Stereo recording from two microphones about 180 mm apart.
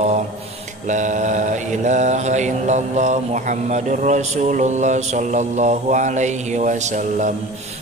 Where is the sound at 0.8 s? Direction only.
45° right (ahead or behind).